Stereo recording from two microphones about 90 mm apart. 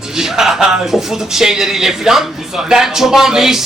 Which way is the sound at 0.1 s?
5° right (ahead or behind).